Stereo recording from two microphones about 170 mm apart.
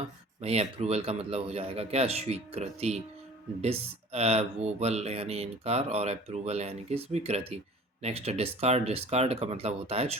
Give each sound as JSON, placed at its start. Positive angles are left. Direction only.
{"t": 0.4, "sound": "speech", "side_deg": -40}